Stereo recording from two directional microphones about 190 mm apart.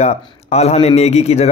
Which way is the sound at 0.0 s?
35° left (ahead or behind).